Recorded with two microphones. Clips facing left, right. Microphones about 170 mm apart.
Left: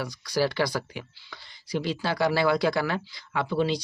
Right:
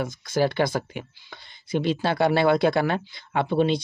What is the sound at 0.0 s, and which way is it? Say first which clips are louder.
Speech: right 4 dB; 25° right (ahead or behind).